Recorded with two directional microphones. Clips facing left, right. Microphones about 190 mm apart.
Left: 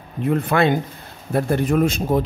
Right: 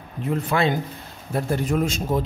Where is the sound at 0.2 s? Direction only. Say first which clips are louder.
Left 4 dB; 60° left (ahead or behind).